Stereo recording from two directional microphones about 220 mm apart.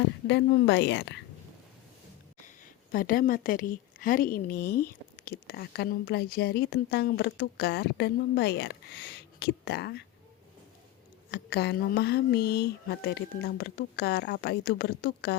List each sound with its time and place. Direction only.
0.3 s a woman's voice: 50° left (ahead or behind)
2.9 s a woman's voice: 40° left (ahead or behind)
11.3 s a woman's voice: 50° left (ahead or behind)